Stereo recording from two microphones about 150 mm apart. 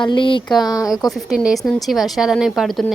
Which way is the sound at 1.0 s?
Centre (ahead or behind).